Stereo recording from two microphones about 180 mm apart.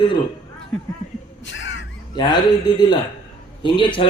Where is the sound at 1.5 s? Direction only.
90° left.